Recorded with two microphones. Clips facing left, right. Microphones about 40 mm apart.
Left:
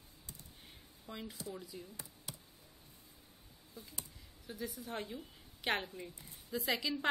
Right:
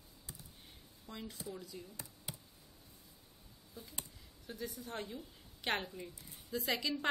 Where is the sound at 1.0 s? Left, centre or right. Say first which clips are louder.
Left 1 dB; centre.